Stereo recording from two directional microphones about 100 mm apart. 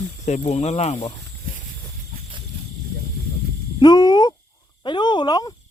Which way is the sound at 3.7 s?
45° left (ahead or behind).